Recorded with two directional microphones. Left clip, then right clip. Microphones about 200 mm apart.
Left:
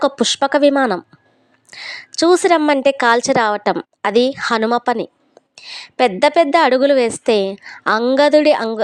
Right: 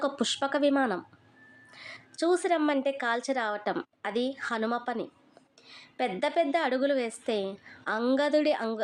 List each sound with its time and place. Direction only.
0.0 s a woman's voice: 40° left (ahead or behind)